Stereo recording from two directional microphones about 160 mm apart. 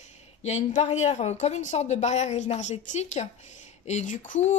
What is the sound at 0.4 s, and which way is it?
Speech, 45° left (ahead or behind).